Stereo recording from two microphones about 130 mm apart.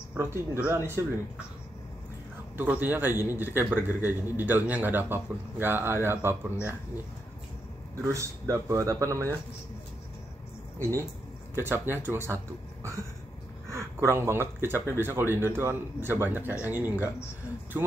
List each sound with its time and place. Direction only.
0.1 s a man's voice: 15° right (ahead or behind)
2.5 s a man's voice: 15° right (ahead or behind)
7.9 s speech: 20° right (ahead or behind)
10.8 s a man's voice: 20° right (ahead or behind)
13.7 s a man's voice: 20° right (ahead or behind)